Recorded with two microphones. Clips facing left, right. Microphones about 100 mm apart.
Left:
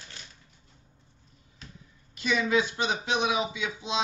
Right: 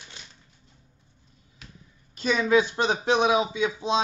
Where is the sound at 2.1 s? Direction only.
35° right (ahead or behind).